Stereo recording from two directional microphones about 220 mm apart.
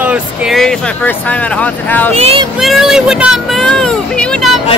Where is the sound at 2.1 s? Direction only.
25° right (ahead or behind).